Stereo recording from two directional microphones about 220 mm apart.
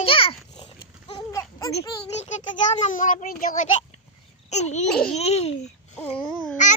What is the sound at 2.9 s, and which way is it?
A child's voice, 35° left (ahead or behind).